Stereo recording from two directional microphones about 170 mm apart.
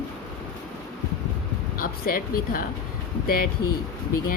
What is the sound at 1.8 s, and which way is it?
Speech, 60° left (ahead or behind).